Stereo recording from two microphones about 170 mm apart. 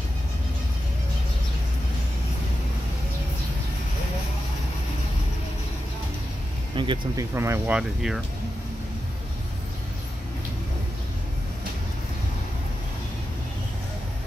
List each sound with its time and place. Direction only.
6.7 s speech: 30° right (ahead or behind)
7.3 s speech: 15° right (ahead or behind)